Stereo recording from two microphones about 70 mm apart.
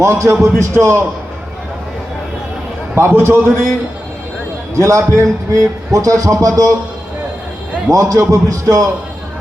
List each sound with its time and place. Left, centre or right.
0.0 s a man's voice: right
2.9 s a man's voice: right
4.8 s a man's voice: right
7.9 s a man's voice: right